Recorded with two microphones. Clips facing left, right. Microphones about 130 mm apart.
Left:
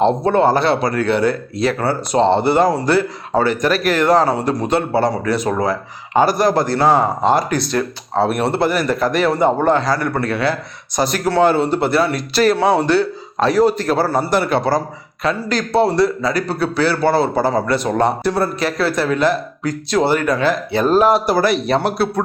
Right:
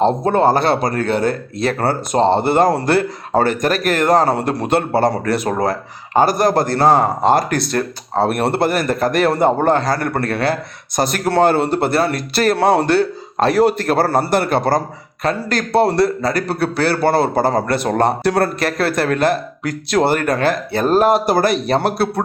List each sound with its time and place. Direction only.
0.0 s a man's voice: 40° right (ahead or behind)